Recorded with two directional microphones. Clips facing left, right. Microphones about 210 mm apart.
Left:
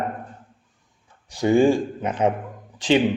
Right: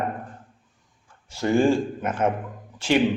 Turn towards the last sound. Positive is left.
turn(degrees=15)  # may be behind; listen again after turning